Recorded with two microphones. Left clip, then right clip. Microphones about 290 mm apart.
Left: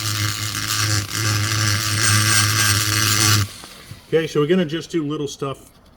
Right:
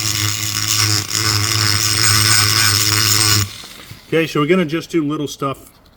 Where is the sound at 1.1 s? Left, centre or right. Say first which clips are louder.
Right 5 dB; centre.